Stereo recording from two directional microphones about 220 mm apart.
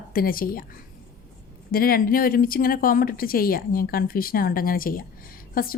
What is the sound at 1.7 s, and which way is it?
Speech, 40° left (ahead or behind).